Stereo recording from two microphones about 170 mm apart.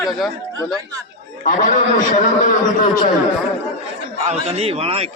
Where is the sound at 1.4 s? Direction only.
50° left (ahead or behind).